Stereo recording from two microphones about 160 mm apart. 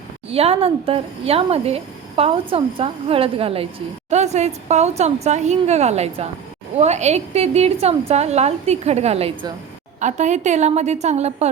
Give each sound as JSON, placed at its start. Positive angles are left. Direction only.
{"t": 0.3, "sound": "a woman's voice", "side_deg": -40}